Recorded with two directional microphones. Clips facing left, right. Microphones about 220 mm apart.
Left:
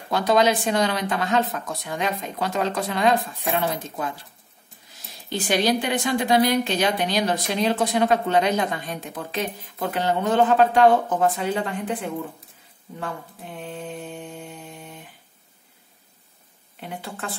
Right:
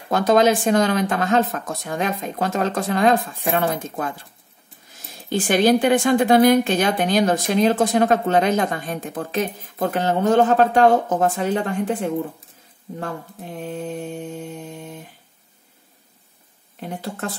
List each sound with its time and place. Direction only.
0.1 s a woman's voice: 50° right (ahead or behind)
5.3 s a woman's voice: 50° right (ahead or behind)
13.0 s mantra: 40° right (ahead or behind)
16.8 s a woman's voice: 45° right (ahead or behind)